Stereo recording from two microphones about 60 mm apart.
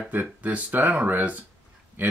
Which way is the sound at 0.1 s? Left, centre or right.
Right.